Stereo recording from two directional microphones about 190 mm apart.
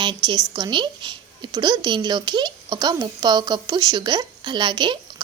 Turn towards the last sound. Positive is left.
turn(degrees=-25)  # may be behind; listen again after turning